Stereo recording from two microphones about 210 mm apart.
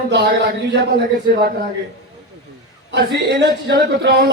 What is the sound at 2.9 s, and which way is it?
A man's voice, 55° right (ahead or behind).